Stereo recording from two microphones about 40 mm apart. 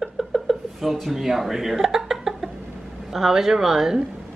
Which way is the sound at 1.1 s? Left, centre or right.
Centre.